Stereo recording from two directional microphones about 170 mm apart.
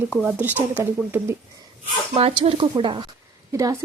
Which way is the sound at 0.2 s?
10° right (ahead or behind).